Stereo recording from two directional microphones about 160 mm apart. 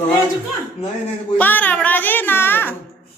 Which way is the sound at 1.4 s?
10° left (ahead or behind).